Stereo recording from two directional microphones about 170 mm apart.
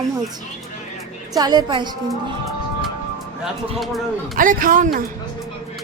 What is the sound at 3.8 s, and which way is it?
Speech, centre (ahead or behind).